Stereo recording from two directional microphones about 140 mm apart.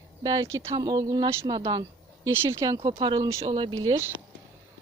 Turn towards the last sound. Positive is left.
turn(degrees=-35)  # may be behind; listen again after turning